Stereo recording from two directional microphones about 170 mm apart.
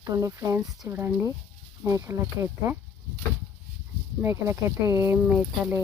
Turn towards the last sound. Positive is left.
turn(degrees=-5)  # may be behind; listen again after turning